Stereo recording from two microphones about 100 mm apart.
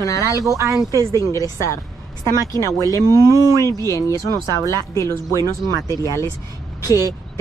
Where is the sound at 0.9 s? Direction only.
30° right (ahead or behind).